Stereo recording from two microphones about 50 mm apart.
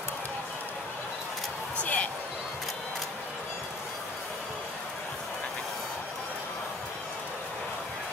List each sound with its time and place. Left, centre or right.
1.8 s music: left